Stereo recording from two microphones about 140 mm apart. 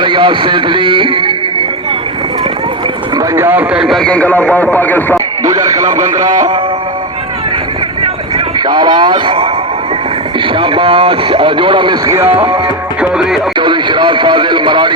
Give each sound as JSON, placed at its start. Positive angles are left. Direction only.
{"t": 0.0, "sound": "speech", "side_deg": -35}
{"t": 3.2, "sound": "a man's voice", "side_deg": -15}
{"t": 5.5, "sound": "speech", "side_deg": -25}
{"t": 5.8, "sound": "a man's voice", "side_deg": -65}
{"t": 8.6, "sound": "speech", "side_deg": -30}
{"t": 10.5, "sound": "speech", "side_deg": -35}
{"t": 12.0, "sound": "speech", "side_deg": -15}
{"t": 13.0, "sound": "music", "side_deg": -5}
{"t": 13.6, "sound": "speech", "side_deg": -35}